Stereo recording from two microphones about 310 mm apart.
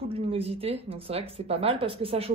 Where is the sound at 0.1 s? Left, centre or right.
Centre.